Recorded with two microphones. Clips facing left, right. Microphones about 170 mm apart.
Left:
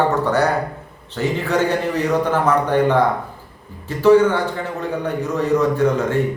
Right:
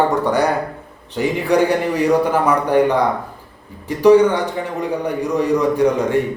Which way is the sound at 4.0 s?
15° right (ahead or behind).